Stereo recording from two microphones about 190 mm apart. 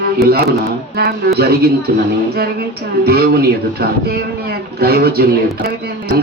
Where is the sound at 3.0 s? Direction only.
55° right (ahead or behind).